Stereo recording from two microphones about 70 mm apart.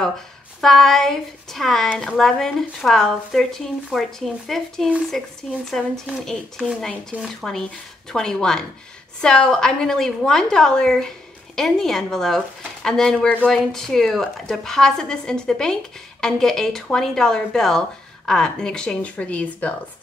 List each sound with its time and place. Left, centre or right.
0.6 s speech: centre